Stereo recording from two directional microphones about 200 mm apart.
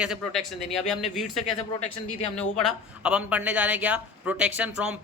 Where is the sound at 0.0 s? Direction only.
Centre (ahead or behind).